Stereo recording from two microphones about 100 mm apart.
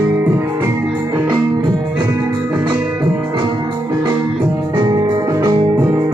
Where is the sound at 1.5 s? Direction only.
50° right (ahead or behind).